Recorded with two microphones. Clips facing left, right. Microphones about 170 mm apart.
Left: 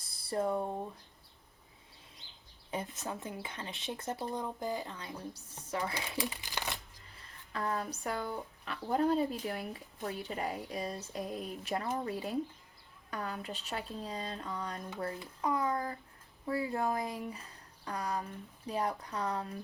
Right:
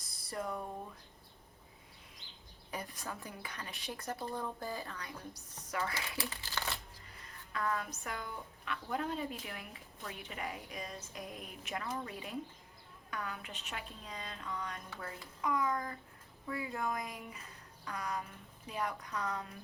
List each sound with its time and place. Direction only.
0.0 s a sound: 30° left (ahead or behind)
2.6 s speech: 25° left (ahead or behind)
7.5 s speech: 35° left (ahead or behind)